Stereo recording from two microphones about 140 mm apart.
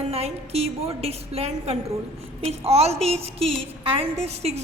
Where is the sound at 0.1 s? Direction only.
45° right (ahead or behind).